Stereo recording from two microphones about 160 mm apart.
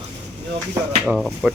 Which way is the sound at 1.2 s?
Centre (ahead or behind).